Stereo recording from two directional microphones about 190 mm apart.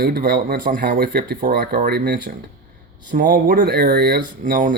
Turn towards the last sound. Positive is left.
turn(degrees=-45)  # may be behind; listen again after turning